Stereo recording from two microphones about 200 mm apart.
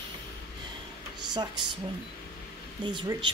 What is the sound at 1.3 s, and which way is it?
Speech, 20° right (ahead or behind).